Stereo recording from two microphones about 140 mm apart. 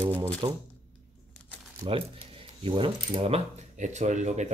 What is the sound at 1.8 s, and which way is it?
Speech, 35° right (ahead or behind).